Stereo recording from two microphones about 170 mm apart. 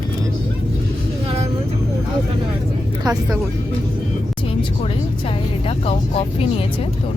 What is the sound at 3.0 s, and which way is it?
Speech, 20° right (ahead or behind).